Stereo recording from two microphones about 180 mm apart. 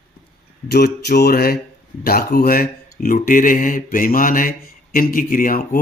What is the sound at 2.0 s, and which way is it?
Speech, 55° left (ahead or behind).